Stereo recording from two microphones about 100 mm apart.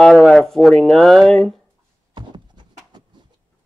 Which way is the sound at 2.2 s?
50° right (ahead or behind).